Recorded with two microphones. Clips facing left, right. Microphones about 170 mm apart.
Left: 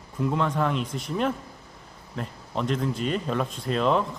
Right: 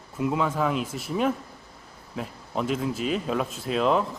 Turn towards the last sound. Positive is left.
turn(degrees=-5)  # may be behind; listen again after turning